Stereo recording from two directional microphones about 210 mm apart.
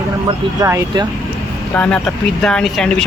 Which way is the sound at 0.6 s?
15° right (ahead or behind).